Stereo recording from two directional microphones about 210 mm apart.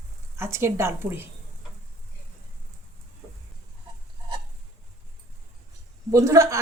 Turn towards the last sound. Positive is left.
turn(degrees=-15)  # may be behind; listen again after turning